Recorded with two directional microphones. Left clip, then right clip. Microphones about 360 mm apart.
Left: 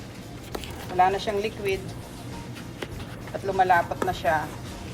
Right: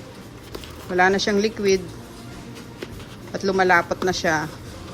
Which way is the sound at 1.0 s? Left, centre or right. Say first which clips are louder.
Right 3 dB; centre.